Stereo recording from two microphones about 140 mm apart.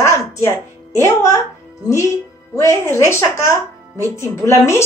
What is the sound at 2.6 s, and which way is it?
A woman's voice, 20° left (ahead or behind).